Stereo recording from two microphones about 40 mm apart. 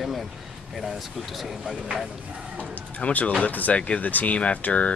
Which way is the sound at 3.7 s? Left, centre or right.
Left.